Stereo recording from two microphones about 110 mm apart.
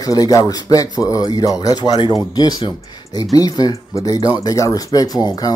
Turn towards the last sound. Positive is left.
turn(degrees=35)  # may be behind; listen again after turning